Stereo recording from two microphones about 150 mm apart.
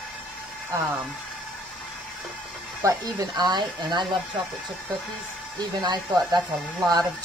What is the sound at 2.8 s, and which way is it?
Speech, 20° right (ahead or behind).